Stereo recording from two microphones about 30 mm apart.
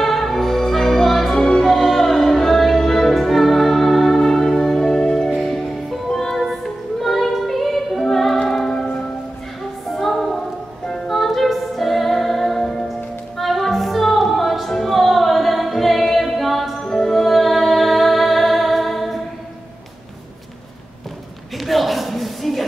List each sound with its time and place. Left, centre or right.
0.0 s music: centre
1.4 s music: centre
1.7 s music: centre
3.2 s music: centre
4.2 s music: centre
8.7 s music: left
9.8 s music: centre
12.5 s music: centre
13.4 s music: centre
16.8 s music: centre
21.5 s a sound: centre